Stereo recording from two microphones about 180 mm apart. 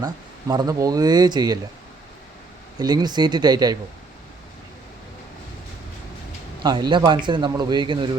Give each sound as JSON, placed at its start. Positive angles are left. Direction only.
{"t": 0.0, "sound": "speech", "side_deg": -20}
{"t": 2.7, "sound": "speech", "side_deg": -20}
{"t": 6.6, "sound": "speech", "side_deg": -25}